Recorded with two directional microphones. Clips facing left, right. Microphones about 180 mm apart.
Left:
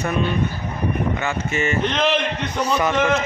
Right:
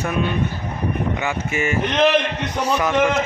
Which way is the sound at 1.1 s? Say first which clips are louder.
Even; 10° right (ahead or behind).